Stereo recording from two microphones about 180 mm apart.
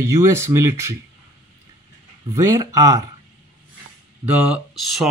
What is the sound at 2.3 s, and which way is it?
Speech, 15° right (ahead or behind).